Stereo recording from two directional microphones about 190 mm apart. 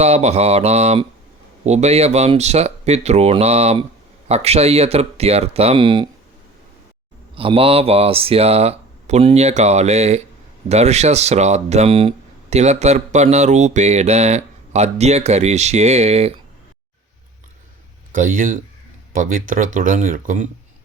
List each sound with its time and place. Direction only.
0.0 s speech: 35° right (ahead or behind)
7.3 s speech: 30° right (ahead or behind)
18.1 s speech: 45° right (ahead or behind)